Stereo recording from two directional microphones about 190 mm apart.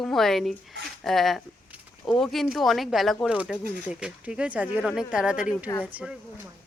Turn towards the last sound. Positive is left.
turn(degrees=-5)  # may be behind; listen again after turning